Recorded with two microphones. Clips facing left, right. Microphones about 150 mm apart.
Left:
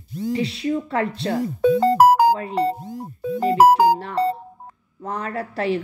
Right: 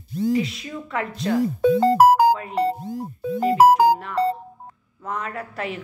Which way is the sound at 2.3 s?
35° left (ahead or behind).